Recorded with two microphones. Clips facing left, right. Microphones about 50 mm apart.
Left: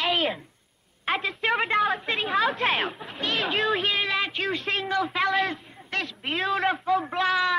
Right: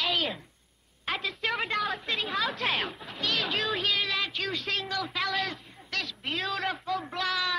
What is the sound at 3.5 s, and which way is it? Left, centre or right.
A man's voice, centre.